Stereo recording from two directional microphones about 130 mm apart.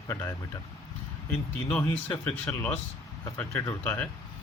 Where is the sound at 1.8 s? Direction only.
15° left (ahead or behind).